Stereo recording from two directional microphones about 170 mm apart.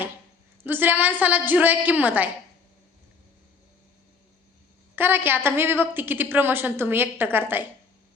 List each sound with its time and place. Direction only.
0.6 s a woman's voice: 10° right (ahead or behind)
4.9 s a woman's voice: 10° right (ahead or behind)